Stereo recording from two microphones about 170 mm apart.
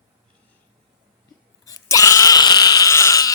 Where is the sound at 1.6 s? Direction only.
20° left (ahead or behind).